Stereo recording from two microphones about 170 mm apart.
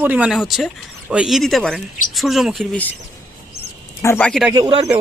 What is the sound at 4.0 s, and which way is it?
Speech, 10° left (ahead or behind).